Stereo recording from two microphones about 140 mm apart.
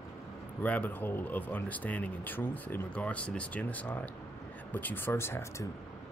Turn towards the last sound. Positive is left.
turn(degrees=20)  # may be behind; listen again after turning